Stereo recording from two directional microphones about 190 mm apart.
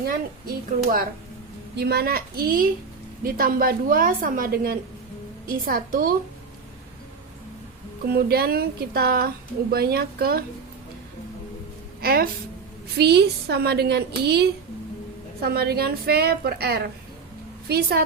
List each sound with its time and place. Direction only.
0.0 s speech: 50° right (ahead or behind)
1.7 s speech: 60° right (ahead or behind)
8.0 s speech: 55° right (ahead or behind)
12.0 s a woman's voice: 50° right (ahead or behind)